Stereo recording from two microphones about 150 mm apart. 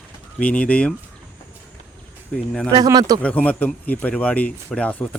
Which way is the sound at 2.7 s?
25° right (ahead or behind).